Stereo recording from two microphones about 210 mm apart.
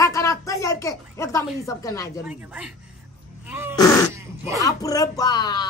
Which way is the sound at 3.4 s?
10° right (ahead or behind).